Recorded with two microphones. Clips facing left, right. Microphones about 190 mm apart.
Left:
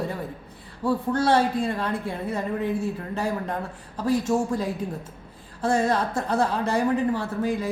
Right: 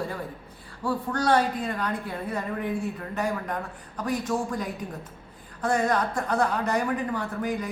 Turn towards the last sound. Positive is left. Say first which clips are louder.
# left 3 dB
turn(degrees=25)  # may be behind; listen again after turning